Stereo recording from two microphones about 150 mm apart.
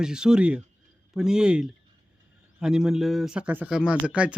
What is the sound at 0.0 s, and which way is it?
Speech, 5° right (ahead or behind).